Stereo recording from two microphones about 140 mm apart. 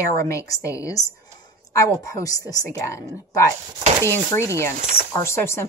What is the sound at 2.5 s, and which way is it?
Speech, 25° left (ahead or behind).